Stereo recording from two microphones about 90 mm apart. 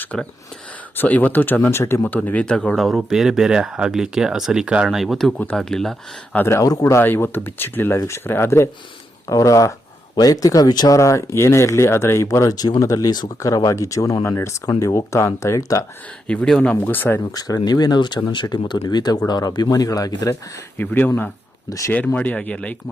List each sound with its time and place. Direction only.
0.0 s speech: 15° left (ahead or behind)
2.6 s speech: centre (ahead or behind)
6.3 s speech: 25° left (ahead or behind)
6.6 s speech: 40° left (ahead or behind)
6.9 s speech: 25° left (ahead or behind); by 10.9 s 45° left (ahead or behind)
10.9 s speech: 35° left (ahead or behind)
16.2 s speech: 10° left (ahead or behind)
17.3 s speech: 45° left (ahead or behind)
20.7 s speech: 20° left (ahead or behind)
21.7 s speech: 40° left (ahead or behind)
21.9 s speech: 15° left (ahead or behind)